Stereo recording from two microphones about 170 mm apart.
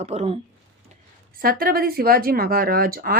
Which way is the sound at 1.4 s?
60° right (ahead or behind).